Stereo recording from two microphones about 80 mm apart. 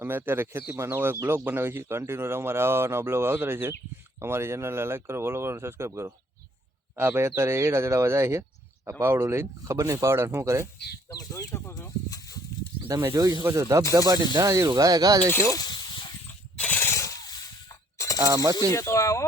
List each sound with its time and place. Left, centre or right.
0.0 s a man's voice: right
11.1 s speech: left
11.5 s speech: left
12.5 s snake: left
13.1 s speech: right
13.4 s a man's voice: right
13.9 s speech: right
15.3 s speech: left
15.5 s a sound: left
16.6 s shatter: left
16.9 s a sound: left
17.9 s mechanisms: left
18.2 s speech: right
18.7 s speech: left